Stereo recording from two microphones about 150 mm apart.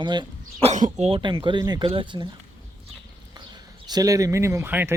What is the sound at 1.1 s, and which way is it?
Speech, 30° right (ahead or behind).